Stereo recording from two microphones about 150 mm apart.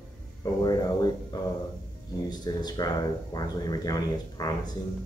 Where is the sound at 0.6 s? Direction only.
25° left (ahead or behind).